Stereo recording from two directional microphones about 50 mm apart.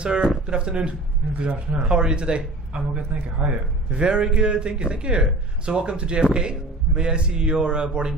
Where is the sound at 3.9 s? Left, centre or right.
Centre.